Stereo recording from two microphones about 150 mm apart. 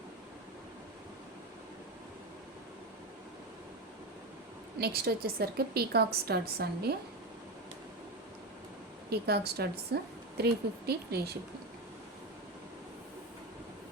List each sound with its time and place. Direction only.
4.8 s a woman's voice: 90° right
9.0 s a woman's voice: 90° right